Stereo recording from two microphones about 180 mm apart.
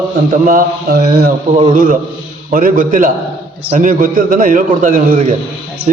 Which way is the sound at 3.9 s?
50° right (ahead or behind).